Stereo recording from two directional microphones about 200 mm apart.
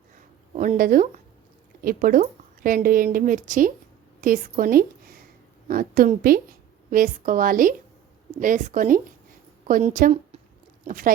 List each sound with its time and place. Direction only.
0.5 s a woman's voice: 40° right (ahead or behind)